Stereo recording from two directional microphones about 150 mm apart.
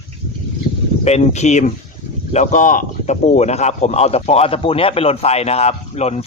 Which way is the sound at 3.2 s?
45° left (ahead or behind).